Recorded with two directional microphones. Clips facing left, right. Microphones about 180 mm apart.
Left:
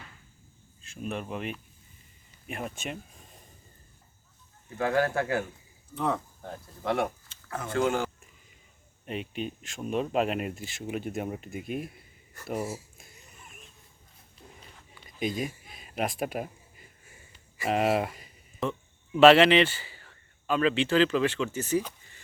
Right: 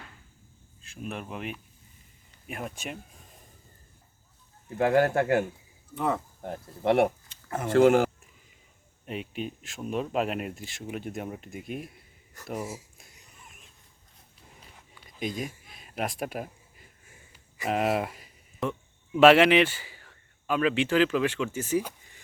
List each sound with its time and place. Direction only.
0.8 s speech: centre (ahead or behind)
4.8 s speech: 15° right (ahead or behind)
5.9 s speech: centre (ahead or behind)
6.4 s speech: 25° right (ahead or behind)
9.0 s speech: 5° right (ahead or behind)
15.2 s speech: centre (ahead or behind)
17.6 s speech: centre (ahead or behind)